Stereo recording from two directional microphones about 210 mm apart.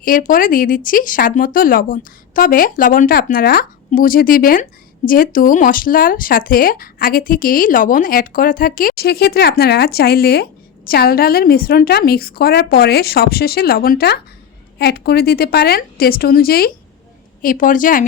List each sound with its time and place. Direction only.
0.0 s speech: 40° left (ahead or behind)